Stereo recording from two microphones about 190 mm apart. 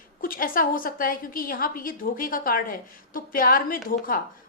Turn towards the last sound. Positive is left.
turn(degrees=45)  # may be behind; listen again after turning